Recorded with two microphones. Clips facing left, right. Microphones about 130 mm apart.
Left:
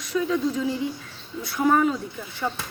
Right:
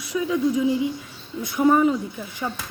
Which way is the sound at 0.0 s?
15° right (ahead or behind).